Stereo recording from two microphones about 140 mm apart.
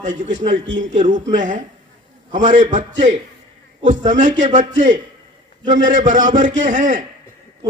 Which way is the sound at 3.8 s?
60° right (ahead or behind).